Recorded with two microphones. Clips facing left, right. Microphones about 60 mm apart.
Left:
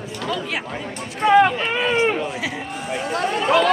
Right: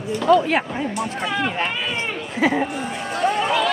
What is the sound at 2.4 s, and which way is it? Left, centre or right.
Speech, right.